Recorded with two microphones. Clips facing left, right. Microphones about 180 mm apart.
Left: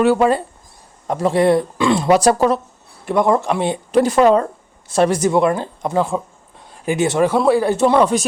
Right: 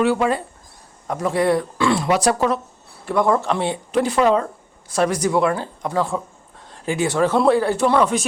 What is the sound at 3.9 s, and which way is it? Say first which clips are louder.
Speech: left 5 dB; 40° left (ahead or behind).